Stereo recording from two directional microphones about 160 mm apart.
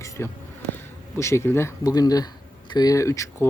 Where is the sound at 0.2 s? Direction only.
15° left (ahead or behind).